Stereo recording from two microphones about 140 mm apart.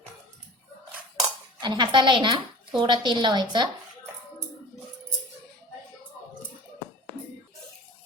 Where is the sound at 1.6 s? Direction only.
35° right (ahead or behind).